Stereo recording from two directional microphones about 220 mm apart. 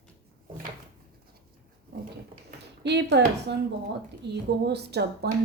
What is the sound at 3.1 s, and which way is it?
Speech, 50° right (ahead or behind).